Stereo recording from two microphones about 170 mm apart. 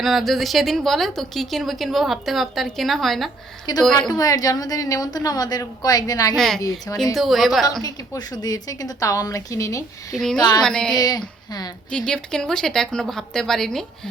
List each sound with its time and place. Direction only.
0.0 s a woman's voice: centre (ahead or behind)
3.7 s a woman's voice: 20° left (ahead or behind)
6.3 s a woman's voice: centre (ahead or behind)
6.6 s a woman's voice: 20° left (ahead or behind)
6.9 s a woman's voice: centre (ahead or behind)
7.8 s a woman's voice: 20° left (ahead or behind)
10.2 s a woman's voice: 5° left (ahead or behind)
10.9 s a woman's voice: 25° left (ahead or behind)
11.9 s a woman's voice: 5° left (ahead or behind)